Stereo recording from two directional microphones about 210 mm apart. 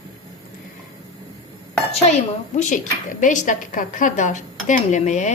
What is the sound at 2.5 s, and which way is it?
A woman's voice, 35° left (ahead or behind).